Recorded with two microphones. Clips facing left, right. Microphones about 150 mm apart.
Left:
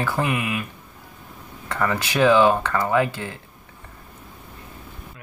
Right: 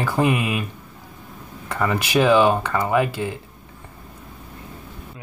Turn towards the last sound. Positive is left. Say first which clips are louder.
# right 1 dB
turn(degrees=-15)  # may be behind; listen again after turning